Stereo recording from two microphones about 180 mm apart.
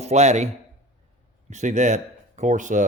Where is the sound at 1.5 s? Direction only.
40° right (ahead or behind).